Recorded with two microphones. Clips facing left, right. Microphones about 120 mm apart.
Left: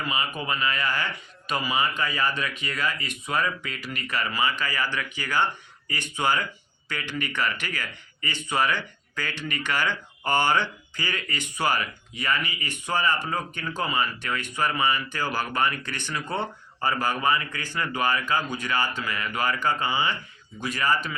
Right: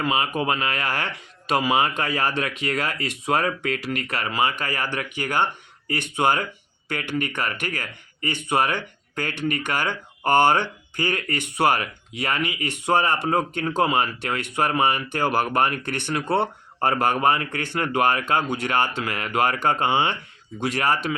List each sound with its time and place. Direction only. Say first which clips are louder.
0.0 s speech: right 7 dB; 90° right; by 20.1 s 65° right (ahead or behind)
20.6 s speech: right 3 dB; 80° right